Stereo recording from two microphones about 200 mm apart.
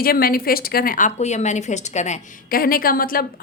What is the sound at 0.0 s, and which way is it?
A woman's voice, 45° left (ahead or behind).